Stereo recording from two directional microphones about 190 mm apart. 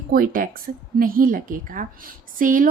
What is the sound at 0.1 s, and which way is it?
A woman's voice, 50° right (ahead or behind).